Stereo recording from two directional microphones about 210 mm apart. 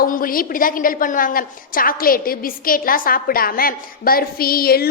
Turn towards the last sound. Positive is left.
turn(degrees=45)  # may be behind; listen again after turning